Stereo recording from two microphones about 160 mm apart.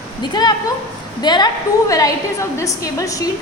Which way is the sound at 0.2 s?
25° left (ahead or behind).